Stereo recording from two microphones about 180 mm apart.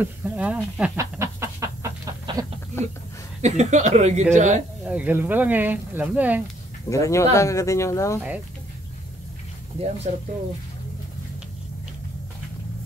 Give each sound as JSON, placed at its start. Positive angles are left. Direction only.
{"t": 0.0, "sound": "speech", "side_deg": -10}
{"t": 0.9, "sound": "chicken", "side_deg": -15}
{"t": 2.8, "sound": "speech", "side_deg": 15}
{"t": 3.4, "sound": "speech", "side_deg": -40}
{"t": 4.8, "sound": "speech", "side_deg": -10}
{"t": 6.9, "sound": "speech", "side_deg": 15}
{"t": 10.1, "sound": "speech", "side_deg": -40}